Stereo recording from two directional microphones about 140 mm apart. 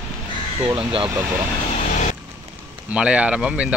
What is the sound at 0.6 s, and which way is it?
Speech, 40° right (ahead or behind).